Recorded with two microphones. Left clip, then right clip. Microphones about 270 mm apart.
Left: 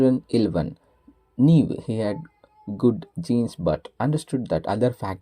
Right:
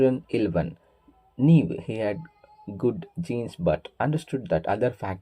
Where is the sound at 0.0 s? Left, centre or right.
Left.